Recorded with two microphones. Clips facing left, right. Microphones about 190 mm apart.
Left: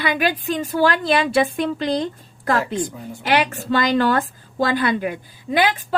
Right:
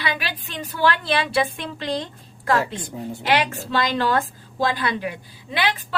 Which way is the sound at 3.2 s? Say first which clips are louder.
Left 3 dB; 50° left (ahead or behind).